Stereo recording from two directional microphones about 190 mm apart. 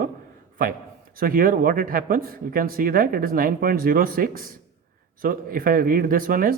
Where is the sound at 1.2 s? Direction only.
50° right (ahead or behind).